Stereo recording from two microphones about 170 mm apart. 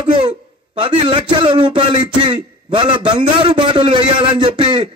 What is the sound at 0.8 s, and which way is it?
A man's voice, 30° right (ahead or behind).